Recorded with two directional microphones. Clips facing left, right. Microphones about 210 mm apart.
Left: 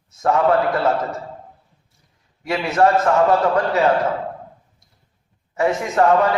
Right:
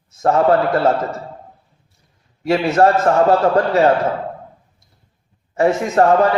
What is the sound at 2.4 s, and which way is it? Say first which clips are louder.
A man's voice: right 3 dB; 40° right (ahead or behind).